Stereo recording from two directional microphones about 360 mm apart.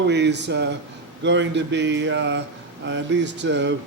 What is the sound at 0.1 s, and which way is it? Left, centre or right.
A man's voice, right.